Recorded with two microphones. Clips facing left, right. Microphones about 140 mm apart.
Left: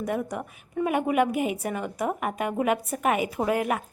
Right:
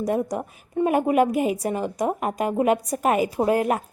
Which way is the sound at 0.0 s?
35° right (ahead or behind).